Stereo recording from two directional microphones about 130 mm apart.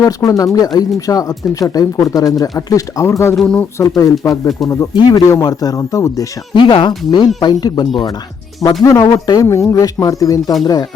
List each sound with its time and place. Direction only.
0.0 s speech: 25° left (ahead or behind)
3.3 s speech: 5° left (ahead or behind)
3.8 s speech: 25° left (ahead or behind)
6.6 s speech: 40° left (ahead or behind)